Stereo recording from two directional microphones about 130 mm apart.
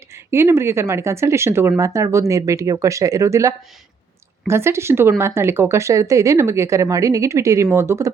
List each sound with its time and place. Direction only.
0.1 s speech: 20° right (ahead or behind)